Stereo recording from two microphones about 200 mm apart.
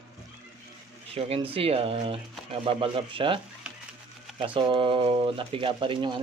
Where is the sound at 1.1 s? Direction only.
30° right (ahead or behind).